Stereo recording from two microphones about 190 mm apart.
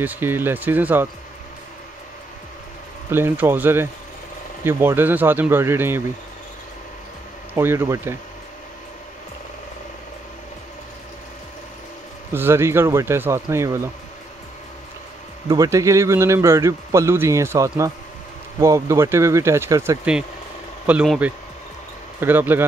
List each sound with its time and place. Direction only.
0.0 s a man's voice: 10° right (ahead or behind)
3.1 s a man's voice: 10° right (ahead or behind)
7.5 s a man's voice: 15° right (ahead or behind)
12.3 s a man's voice: 15° right (ahead or behind)
15.4 s a man's voice: 15° right (ahead or behind)